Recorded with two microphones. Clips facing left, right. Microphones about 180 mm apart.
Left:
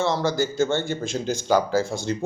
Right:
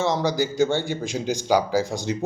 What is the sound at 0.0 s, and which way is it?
A man's voice, 15° right (ahead or behind).